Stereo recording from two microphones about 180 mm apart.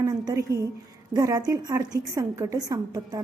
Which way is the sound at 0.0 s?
20° right (ahead or behind).